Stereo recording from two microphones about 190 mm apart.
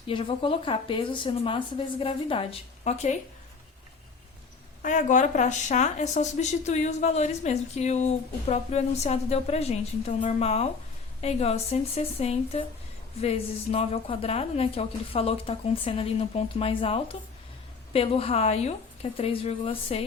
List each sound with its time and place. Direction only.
0.1 s speech: 25° left (ahead or behind)
4.8 s a woman's voice: 40° left (ahead or behind)